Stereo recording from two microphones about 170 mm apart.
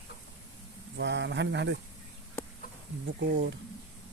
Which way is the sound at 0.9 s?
90° right.